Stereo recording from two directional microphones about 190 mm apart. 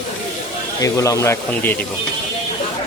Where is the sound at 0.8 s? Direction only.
15° left (ahead or behind).